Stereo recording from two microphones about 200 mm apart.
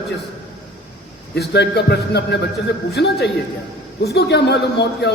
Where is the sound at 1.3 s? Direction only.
60° left (ahead or behind).